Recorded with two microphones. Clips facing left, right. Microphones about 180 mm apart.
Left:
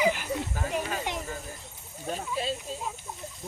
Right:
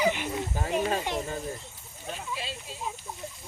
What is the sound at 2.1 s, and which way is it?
Speech, 45° left (ahead or behind).